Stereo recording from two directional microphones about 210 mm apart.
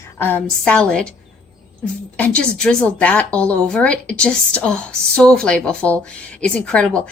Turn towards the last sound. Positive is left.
turn(degrees=5)  # may be behind; listen again after turning